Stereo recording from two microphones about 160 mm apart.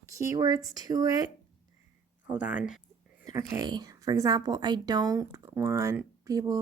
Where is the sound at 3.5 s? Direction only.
25° right (ahead or behind).